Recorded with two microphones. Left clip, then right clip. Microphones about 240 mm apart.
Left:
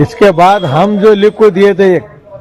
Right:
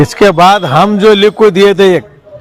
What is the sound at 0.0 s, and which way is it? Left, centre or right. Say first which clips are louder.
A man's voice: right 1 dB; right.